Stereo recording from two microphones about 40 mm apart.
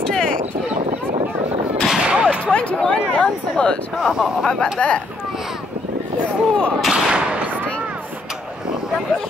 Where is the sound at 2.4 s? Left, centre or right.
Left.